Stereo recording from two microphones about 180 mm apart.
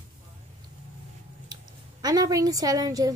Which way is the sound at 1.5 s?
20° right (ahead or behind).